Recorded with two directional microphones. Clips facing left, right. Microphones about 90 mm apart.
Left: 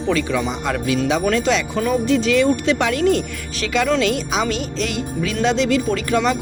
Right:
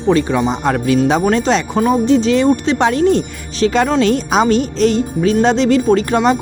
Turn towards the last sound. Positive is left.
turn(degrees=-35)  # may be behind; listen again after turning